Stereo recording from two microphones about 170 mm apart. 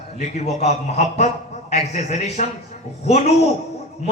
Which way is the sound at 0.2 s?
40° left (ahead or behind).